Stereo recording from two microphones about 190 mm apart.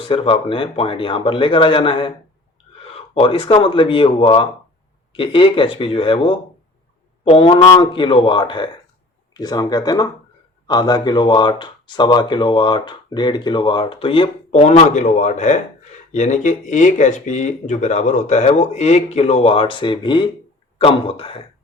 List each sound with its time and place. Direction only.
0.1 s speech: 30° left (ahead or behind)